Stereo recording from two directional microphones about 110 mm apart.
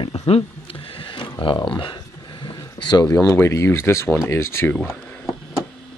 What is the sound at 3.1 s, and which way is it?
Speech, 25° left (ahead or behind).